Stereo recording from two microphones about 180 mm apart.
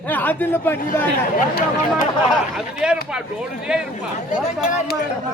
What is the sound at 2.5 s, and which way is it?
Speech, 5° right (ahead or behind).